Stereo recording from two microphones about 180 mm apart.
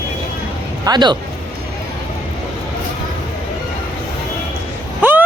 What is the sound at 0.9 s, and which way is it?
Speech, 25° right (ahead or behind).